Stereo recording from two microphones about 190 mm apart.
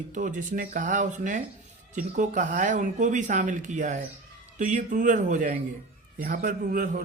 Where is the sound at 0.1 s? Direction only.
40° right (ahead or behind).